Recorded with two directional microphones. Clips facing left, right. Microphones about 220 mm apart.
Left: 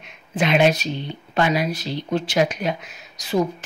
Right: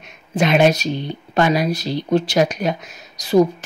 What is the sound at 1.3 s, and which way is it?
Speech, 40° right (ahead or behind).